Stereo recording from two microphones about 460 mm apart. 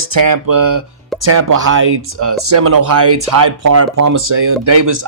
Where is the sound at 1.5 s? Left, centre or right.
Right.